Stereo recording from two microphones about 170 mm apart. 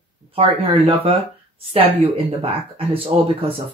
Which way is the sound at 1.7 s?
35° right (ahead or behind).